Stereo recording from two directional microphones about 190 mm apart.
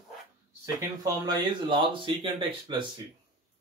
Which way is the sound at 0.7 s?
20° right (ahead or behind).